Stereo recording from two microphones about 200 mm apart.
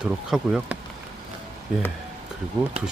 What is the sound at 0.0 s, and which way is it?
Speech, 5° right (ahead or behind).